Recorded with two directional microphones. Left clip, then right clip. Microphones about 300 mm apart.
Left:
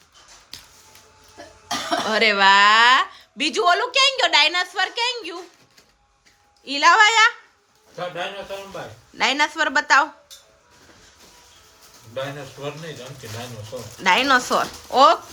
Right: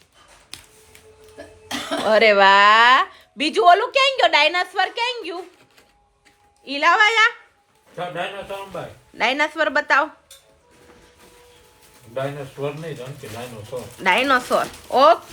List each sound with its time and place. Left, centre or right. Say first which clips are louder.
2.0 s speech: right 3 dB; centre
6.7 s speech: left 1 dB; centre
9.1 s speech: even; centre
12.2 s speech: right 3 dB; right
14.0 s speech: left 1 dB; centre